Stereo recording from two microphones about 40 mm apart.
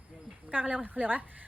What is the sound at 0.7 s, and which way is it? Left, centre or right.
Speech, right.